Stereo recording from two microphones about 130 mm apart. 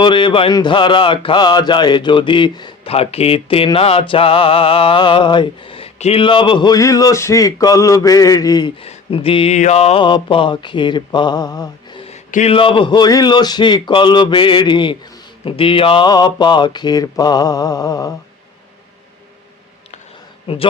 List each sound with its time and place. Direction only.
0.0 s a man's voice: 40° left (ahead or behind)
2.9 s a sound: 50° left (ahead or behind)
6.0 s speech: 45° left (ahead or behind); by 8.7 s 30° left (ahead or behind)
8.8 s speech: 45° left (ahead or behind)
9.6 s mantra: 60° left (ahead or behind)
10.0 s a man's voice: 40° left (ahead or behind)
20.5 s a sound: 50° left (ahead or behind)